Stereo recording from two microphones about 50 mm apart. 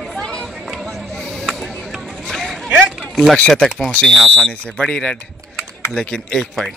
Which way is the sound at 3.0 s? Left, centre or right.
Centre.